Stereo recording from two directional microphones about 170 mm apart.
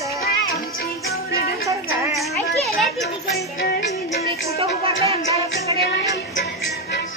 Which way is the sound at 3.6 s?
65° left (ahead or behind).